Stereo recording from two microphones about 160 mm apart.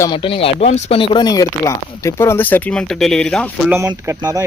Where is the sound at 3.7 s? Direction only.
15° right (ahead or behind).